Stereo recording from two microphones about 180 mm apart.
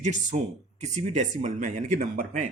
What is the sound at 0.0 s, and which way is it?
Speech, 40° right (ahead or behind).